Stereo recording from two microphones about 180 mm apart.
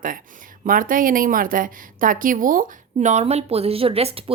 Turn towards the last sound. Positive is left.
turn(degrees=-30)  # may be behind; listen again after turning